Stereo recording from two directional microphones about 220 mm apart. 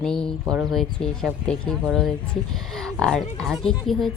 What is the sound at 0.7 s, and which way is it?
Speech, centre (ahead or behind).